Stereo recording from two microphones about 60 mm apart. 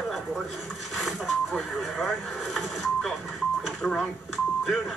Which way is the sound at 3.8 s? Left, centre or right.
Centre.